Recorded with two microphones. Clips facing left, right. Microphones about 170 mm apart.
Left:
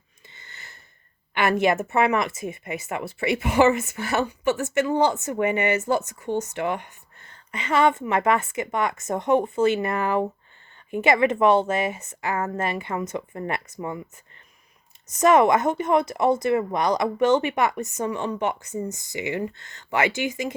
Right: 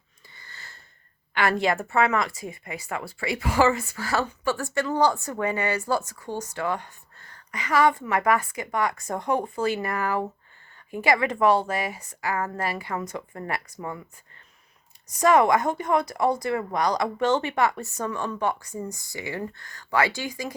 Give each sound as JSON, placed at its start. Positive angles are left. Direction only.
{"t": 0.3, "sound": "wheeze", "side_deg": 20}
{"t": 1.3, "sound": "speech", "side_deg": 20}
{"t": 15.0, "sound": "speech", "side_deg": 20}